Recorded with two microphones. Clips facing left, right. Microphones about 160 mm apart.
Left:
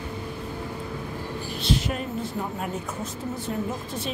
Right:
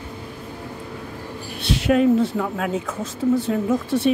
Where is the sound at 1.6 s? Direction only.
75° right (ahead or behind).